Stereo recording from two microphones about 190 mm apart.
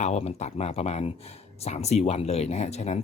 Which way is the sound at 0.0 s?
35° left (ahead or behind).